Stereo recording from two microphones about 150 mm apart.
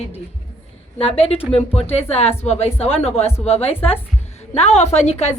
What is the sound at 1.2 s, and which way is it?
A woman's voice, 40° left (ahead or behind).